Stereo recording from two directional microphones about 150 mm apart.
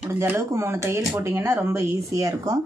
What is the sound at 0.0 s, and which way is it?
Speech, 15° right (ahead or behind).